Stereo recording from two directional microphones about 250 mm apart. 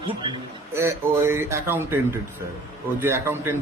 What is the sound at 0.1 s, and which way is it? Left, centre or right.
A man's voice, centre.